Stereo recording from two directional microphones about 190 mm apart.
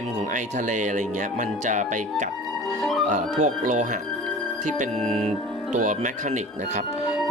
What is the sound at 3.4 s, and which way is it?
Speech, 40° right (ahead or behind).